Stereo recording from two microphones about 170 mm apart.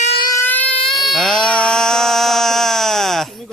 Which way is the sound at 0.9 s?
Centre (ahead or behind).